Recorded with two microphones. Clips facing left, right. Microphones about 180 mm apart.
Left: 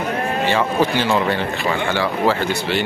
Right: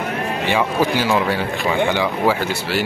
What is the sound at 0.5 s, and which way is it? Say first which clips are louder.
Speech: right 1 dB; 10° right (ahead or behind).